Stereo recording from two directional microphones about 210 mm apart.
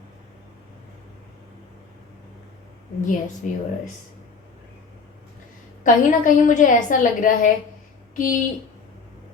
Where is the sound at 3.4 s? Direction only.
35° left (ahead or behind).